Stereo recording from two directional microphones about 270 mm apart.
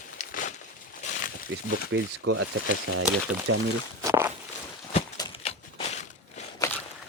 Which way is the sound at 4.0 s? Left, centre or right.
Centre.